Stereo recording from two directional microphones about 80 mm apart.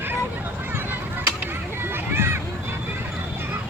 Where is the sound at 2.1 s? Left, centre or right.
Right.